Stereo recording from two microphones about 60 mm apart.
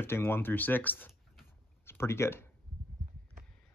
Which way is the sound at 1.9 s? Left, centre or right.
Left.